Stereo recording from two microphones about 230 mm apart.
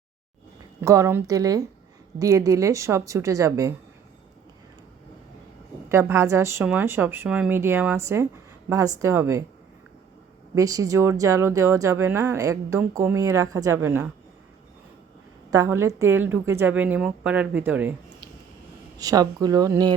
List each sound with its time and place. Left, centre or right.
0.8 s a woman's voice: centre
5.9 s a woman's voice: centre
10.5 s a woman's voice: centre
15.4 s a woman's voice: centre
18.9 s a woman's voice: centre